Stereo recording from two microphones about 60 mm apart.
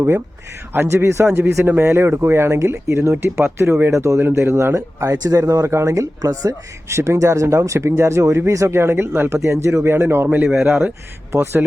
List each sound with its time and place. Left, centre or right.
0.9 s speech: right
4.2 s speech: right
4.5 s speech: right
5.2 s speech: right
6.8 s speech: right
8.8 s speech: right
9.4 s speech: right
9.9 s speech: right
10.4 s speech: centre
11.3 s speech: right